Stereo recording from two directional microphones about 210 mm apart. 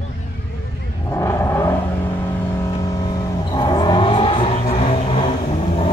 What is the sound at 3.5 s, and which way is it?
Vehicle, 20° left (ahead or behind).